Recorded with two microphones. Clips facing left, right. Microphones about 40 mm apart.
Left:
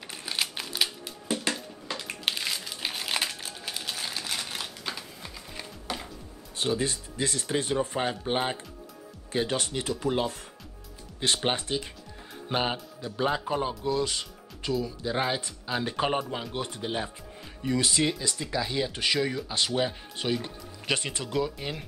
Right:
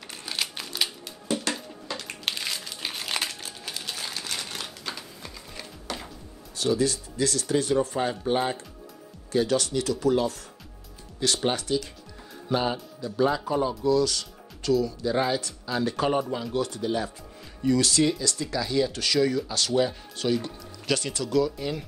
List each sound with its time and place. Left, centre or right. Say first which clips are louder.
0.1 s music: even; centre
1.9 s crumpling: left 1 dB; centre
6.5 s speech: right 4 dB; left